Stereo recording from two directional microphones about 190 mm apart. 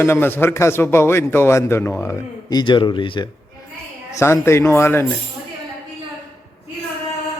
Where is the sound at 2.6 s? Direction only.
25° left (ahead or behind).